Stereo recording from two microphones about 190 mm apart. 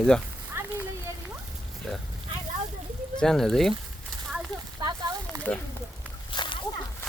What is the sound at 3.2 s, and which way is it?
Speech, 5° left (ahead or behind).